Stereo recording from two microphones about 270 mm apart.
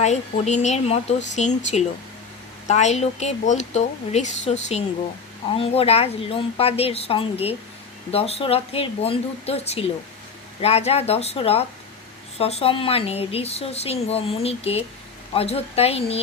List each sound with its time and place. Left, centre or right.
0.0 s a woman's voice: left